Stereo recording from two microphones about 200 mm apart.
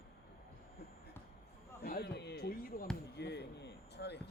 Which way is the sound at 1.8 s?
50° left (ahead or behind).